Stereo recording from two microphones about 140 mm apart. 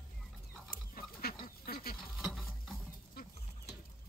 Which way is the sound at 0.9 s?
90° left.